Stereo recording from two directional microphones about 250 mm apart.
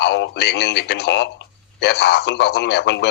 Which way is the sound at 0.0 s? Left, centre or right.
Left.